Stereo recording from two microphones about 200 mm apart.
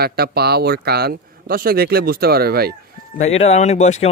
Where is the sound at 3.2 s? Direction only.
35° left (ahead or behind).